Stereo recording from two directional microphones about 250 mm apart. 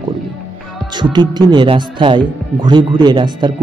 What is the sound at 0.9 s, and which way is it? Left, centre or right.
Speech, centre.